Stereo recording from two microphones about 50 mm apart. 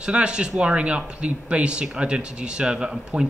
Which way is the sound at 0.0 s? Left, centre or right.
Centre.